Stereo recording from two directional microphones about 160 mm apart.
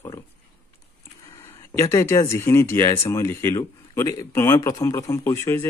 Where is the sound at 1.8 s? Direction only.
20° left (ahead or behind).